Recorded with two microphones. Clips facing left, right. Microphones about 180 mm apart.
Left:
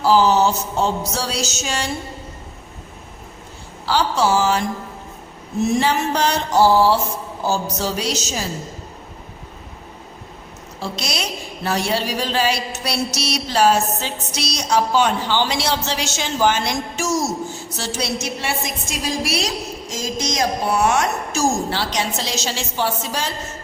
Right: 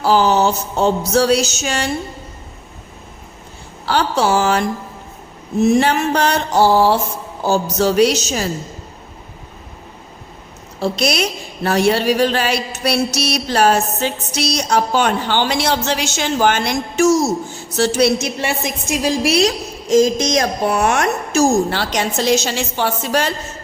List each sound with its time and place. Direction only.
0.0 s music: 60° right (ahead or behind)
3.8 s music: 60° right (ahead or behind)
5.8 s music: 60° right (ahead or behind)
10.8 s music: 60° right (ahead or behind)